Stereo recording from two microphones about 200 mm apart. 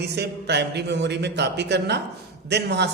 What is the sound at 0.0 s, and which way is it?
A man's voice, 55° right (ahead or behind).